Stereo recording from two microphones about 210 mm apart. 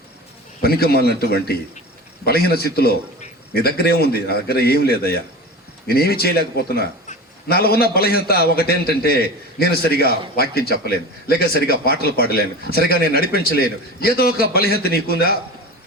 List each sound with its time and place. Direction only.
0.6 s a man's voice: 45° left (ahead or behind)